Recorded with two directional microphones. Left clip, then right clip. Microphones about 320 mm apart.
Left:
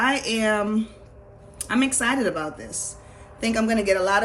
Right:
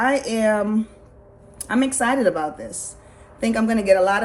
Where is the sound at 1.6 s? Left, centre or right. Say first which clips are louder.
Right 2 dB; centre.